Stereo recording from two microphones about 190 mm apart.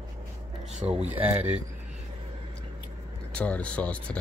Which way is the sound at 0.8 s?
20° right (ahead or behind).